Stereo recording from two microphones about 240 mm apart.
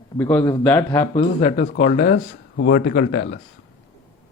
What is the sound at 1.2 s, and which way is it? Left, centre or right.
Speech, left.